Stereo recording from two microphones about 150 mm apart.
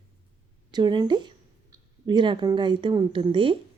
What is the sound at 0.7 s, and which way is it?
Speech, 30° right (ahead or behind).